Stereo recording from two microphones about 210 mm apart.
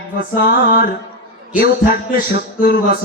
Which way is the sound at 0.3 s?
50° left (ahead or behind).